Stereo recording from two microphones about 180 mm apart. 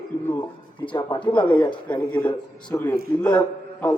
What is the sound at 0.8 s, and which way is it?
A man's voice, 25° left (ahead or behind).